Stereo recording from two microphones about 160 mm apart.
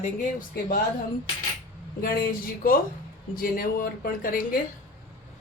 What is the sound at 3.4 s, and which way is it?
Speech, 60° left (ahead or behind).